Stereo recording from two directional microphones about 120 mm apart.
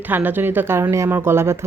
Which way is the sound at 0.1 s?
15° right (ahead or behind).